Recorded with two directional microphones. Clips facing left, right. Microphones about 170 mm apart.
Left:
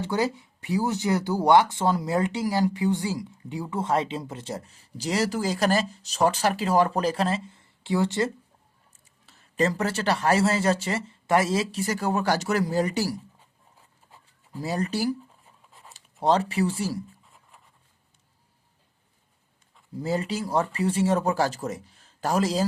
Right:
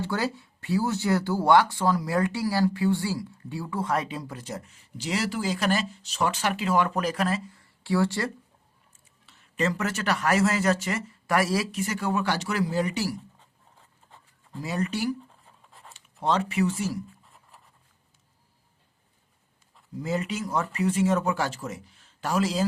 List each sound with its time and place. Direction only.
0.0 s speech: 20° left (ahead or behind)
9.2 s speech: 40° left (ahead or behind)
14.6 s speech: 35° left (ahead or behind)
16.2 s speech: 35° left (ahead or behind)
20.0 s speech: 35° left (ahead or behind)